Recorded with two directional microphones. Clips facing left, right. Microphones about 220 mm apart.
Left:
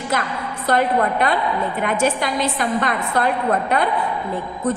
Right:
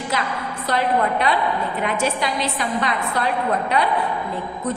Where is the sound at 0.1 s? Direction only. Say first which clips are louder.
Left 3 dB; 50° left (ahead or behind).